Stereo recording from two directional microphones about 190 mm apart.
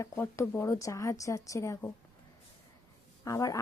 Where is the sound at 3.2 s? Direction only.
20° left (ahead or behind).